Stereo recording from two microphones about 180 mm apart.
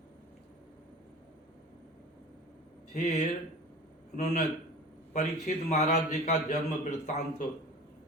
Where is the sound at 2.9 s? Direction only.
40° left (ahead or behind).